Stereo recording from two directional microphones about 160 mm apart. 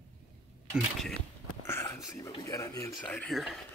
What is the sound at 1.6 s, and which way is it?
Whispering, 15° left (ahead or behind).